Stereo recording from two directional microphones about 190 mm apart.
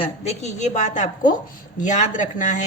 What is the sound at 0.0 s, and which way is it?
Speech, 35° left (ahead or behind).